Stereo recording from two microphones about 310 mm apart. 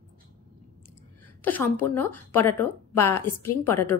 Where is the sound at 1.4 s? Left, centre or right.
Centre.